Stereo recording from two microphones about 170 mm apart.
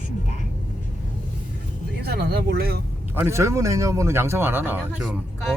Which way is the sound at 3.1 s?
15° right (ahead or behind).